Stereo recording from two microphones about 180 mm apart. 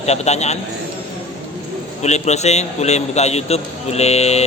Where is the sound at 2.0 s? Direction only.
40° left (ahead or behind).